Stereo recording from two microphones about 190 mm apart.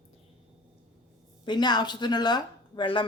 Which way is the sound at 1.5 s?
20° left (ahead or behind).